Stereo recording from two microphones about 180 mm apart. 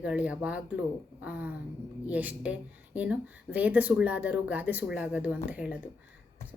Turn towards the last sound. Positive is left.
turn(degrees=-10)  # may be behind; listen again after turning